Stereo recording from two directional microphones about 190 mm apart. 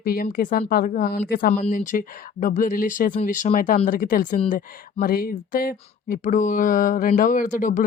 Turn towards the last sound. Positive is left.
turn(degrees=45)  # may be behind; listen again after turning